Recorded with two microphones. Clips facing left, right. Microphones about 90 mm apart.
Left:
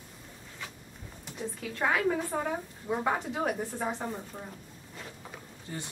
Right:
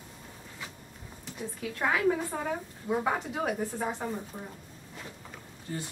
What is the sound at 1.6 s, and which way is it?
Speech, centre (ahead or behind).